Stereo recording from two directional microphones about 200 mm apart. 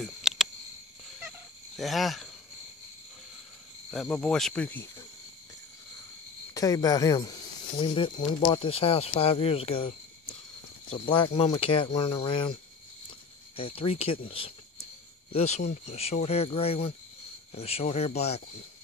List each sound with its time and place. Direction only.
0.0 s a sound: centre (ahead or behind)
1.8 s speech: centre (ahead or behind)
3.9 s speech: 5° left (ahead or behind)
6.5 s speech: 20° left (ahead or behind)
13.6 s speech: 30° left (ahead or behind)